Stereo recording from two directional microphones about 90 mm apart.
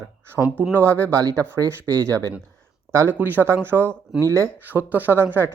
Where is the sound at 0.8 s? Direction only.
30° right (ahead or behind).